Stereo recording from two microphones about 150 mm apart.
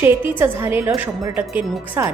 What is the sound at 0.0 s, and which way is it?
A woman's voice, 15° right (ahead or behind).